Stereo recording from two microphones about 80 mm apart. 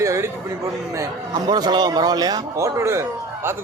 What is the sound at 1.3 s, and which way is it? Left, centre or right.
A man's voice, right.